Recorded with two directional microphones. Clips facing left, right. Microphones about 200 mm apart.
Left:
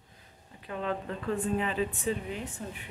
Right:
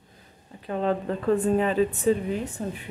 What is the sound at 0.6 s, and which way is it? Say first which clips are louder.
Speech: right 8 dB; 35° right (ahead or behind).